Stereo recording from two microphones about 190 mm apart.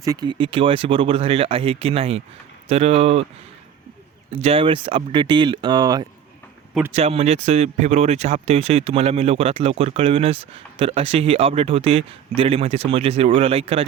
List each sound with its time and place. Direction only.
0.0 s speech: 20° right (ahead or behind)
4.4 s speech: 30° right (ahead or behind)
6.9 s speech: 30° right (ahead or behind)